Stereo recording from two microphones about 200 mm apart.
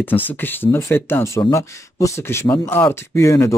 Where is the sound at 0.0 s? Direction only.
10° left (ahead or behind).